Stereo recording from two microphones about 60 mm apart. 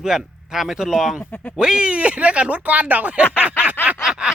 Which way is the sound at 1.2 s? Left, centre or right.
Left.